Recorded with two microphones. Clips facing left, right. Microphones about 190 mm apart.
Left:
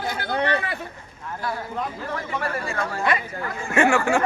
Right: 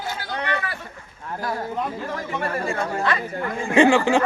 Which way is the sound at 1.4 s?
40° right (ahead or behind).